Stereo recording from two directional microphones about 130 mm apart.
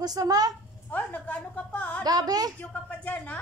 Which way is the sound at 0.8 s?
10° left (ahead or behind).